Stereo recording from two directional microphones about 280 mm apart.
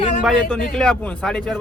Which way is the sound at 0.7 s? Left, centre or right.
Centre.